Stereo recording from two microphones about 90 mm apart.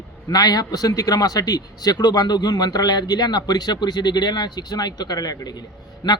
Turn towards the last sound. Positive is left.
turn(degrees=50)  # may be behind; listen again after turning